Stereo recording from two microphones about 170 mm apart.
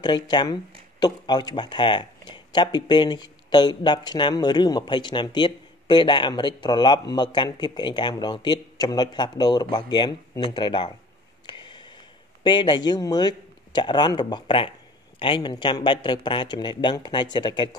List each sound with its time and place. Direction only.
0.0 s speech: 25° left (ahead or behind)
11.4 s a sound: 25° left (ahead or behind)
12.4 s speech: 25° left (ahead or behind)